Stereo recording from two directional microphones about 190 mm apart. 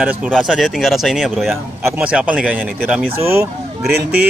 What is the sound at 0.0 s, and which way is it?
Speech, 10° right (ahead or behind).